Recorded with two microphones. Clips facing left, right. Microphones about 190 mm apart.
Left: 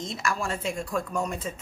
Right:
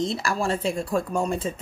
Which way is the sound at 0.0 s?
30° right (ahead or behind).